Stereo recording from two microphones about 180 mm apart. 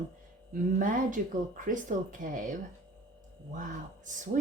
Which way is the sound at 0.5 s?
45° right (ahead or behind).